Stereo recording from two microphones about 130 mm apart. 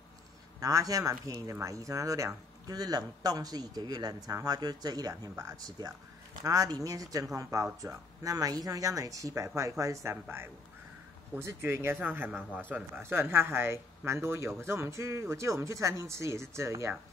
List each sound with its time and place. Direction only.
0.6 s speech: 25° right (ahead or behind)